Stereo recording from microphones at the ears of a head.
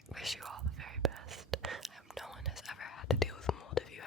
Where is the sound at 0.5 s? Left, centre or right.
Right.